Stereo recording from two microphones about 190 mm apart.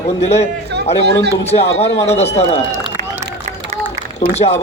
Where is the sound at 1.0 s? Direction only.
60° right (ahead or behind).